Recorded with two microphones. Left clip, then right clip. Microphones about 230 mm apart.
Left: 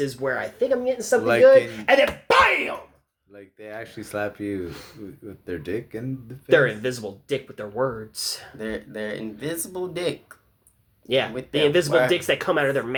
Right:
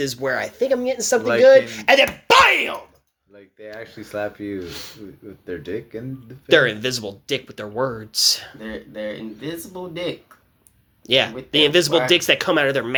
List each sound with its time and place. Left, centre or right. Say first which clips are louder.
0.0 s speech: right 3 dB; right
3.3 s speech: right 1 dB; centre
4.6 s speech: right 2 dB; right
5.5 s speech: right 1 dB; centre
6.5 s speech: right 3 dB; right
8.5 s speech: left 1 dB; left
11.5 s speech: right 3 dB; right